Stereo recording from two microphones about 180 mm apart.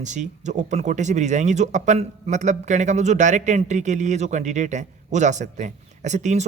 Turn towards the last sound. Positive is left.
turn(degrees=-40)  # may be behind; listen again after turning